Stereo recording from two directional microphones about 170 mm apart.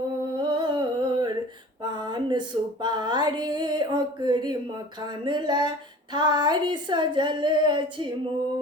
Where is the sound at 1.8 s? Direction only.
25° right (ahead or behind).